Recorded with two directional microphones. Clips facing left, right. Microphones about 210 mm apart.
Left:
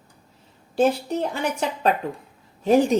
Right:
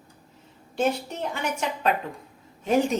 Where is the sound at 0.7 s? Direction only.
35° left (ahead or behind).